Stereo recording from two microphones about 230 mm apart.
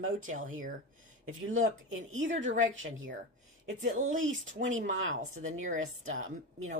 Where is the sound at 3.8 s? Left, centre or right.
Right.